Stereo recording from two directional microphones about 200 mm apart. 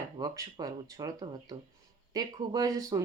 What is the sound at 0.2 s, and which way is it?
Speech, 20° right (ahead or behind).